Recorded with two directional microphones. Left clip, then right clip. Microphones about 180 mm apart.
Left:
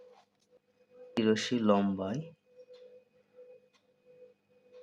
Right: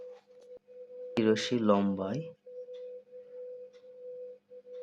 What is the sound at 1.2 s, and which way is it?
Speech, 10° right (ahead or behind).